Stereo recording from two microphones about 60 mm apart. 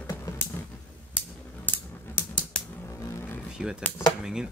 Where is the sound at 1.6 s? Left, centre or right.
Left.